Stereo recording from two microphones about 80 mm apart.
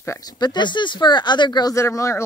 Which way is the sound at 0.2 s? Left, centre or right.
Left.